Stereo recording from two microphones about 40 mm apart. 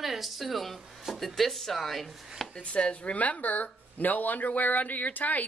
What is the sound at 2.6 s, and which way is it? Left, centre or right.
Speech, left.